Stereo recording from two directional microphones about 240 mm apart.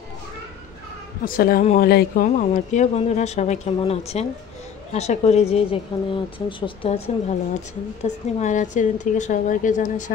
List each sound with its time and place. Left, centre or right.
1.2 s a woman's voice: left